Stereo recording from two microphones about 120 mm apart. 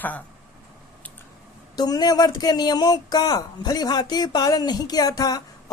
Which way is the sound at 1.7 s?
35° left (ahead or behind).